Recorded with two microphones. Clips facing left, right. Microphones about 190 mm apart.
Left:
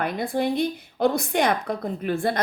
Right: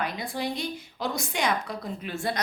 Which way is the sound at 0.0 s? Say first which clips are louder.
Left 6 dB; 55° left (ahead or behind).